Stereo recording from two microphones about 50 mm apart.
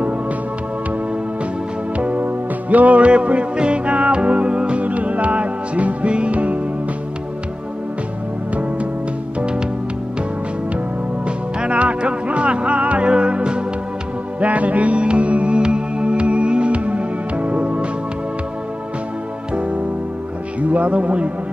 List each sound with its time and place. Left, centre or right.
2.0 s music: right
9.4 s music: right
11.2 s music: right
14.4 s music: right
19.5 s music: right
20.6 s speech: right